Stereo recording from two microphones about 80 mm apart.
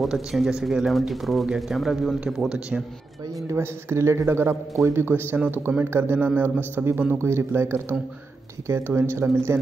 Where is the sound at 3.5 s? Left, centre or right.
Right.